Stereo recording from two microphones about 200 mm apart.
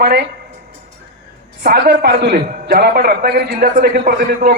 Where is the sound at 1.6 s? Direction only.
50° right (ahead or behind).